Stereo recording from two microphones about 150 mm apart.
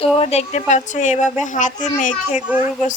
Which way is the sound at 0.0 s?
40° left (ahead or behind).